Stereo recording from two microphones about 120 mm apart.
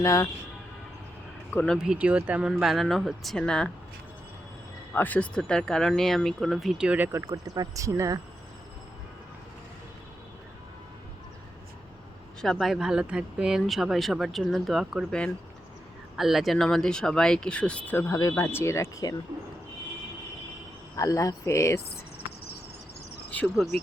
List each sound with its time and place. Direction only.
0.0 s speech: 25° left (ahead or behind)
1.5 s speech: 10° left (ahead or behind)
1.8 s speech: 10° right (ahead or behind)
4.9 s speech: 15° left (ahead or behind); by 7.1 s 10° right (ahead or behind)
7.1 s speech: 25° right (ahead or behind)
12.4 s speech: centre (ahead or behind); by 19.1 s 25° left (ahead or behind)
20.9 s speech: 30° left (ahead or behind)